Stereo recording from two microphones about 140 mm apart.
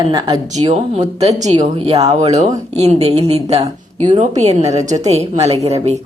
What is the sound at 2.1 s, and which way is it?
Speech, 55° right (ahead or behind).